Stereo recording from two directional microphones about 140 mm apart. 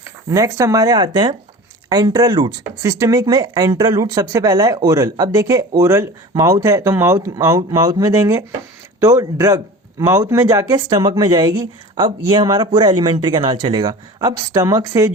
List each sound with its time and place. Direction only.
0.3 s speech: 20° right (ahead or behind)